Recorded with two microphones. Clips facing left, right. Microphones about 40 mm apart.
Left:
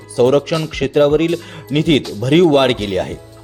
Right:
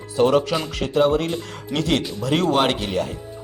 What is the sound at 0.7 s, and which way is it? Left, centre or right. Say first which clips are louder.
Speech: left 6 dB; left.